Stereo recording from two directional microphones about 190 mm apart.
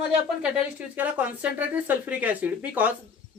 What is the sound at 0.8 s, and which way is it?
Speech, 10° right (ahead or behind).